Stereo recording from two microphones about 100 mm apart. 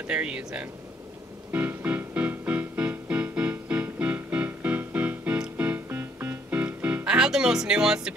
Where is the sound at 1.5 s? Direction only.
15° right (ahead or behind).